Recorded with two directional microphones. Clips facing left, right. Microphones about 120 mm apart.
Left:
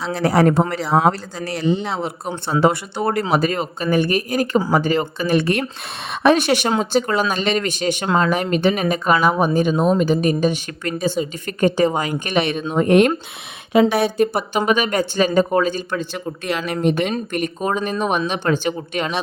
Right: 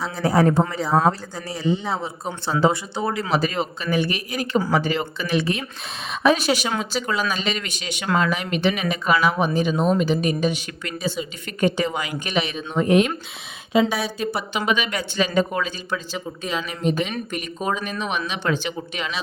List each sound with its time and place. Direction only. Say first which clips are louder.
0.1 s speech: left 3 dB; 85° left
2.6 s speech: left 3 dB; 60° left (ahead or behind)
6.7 s speech: left 6 dB; 45° left (ahead or behind)
16.6 s speech: left 6 dB; 60° left (ahead or behind)
17.3 s speech: left 4 dB; 45° left (ahead or behind)